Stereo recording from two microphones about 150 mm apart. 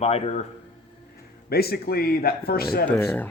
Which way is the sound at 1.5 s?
90° left.